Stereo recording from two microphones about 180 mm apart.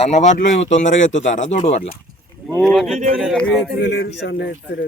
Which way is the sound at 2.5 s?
5° left (ahead or behind).